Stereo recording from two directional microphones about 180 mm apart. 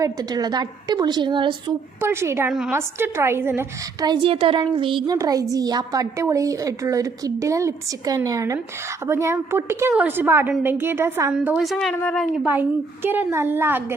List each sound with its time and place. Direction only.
0.0 s speech: 20° right (ahead or behind)
2.0 s a woman's voice: 15° right (ahead or behind)
4.0 s a woman's voice: 25° right (ahead or behind); by 13.8 s 10° right (ahead or behind)